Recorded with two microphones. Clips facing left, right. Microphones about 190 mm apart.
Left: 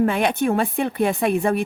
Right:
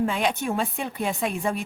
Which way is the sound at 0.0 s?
60° left (ahead or behind).